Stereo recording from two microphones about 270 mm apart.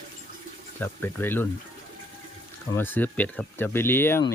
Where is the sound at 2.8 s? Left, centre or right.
Centre.